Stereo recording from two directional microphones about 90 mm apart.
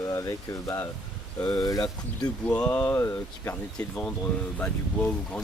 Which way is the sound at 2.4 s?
10° left (ahead or behind).